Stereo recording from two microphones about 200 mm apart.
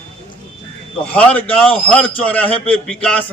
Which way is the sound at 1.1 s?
5° left (ahead or behind).